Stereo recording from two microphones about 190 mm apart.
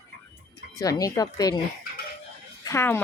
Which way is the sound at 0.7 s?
20° left (ahead or behind).